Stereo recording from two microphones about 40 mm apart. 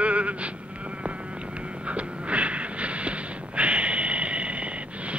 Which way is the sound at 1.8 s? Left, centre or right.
Right.